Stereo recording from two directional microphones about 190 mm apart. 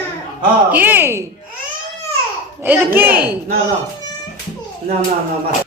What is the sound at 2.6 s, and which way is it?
Speech, 10° right (ahead or behind).